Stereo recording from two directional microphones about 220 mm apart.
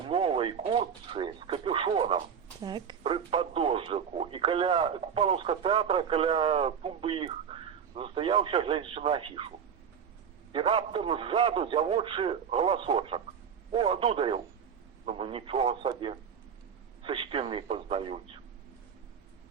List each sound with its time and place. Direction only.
0.1 s speech: 25° right (ahead or behind)
10.5 s speech: 25° right (ahead or behind)